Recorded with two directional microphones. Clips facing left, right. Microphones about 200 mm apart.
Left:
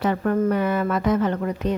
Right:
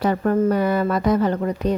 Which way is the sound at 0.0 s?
35° right (ahead or behind).